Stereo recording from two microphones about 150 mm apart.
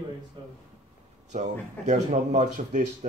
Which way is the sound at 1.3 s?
50° right (ahead or behind).